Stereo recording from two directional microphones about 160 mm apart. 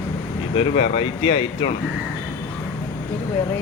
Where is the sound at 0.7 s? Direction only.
35° left (ahead or behind).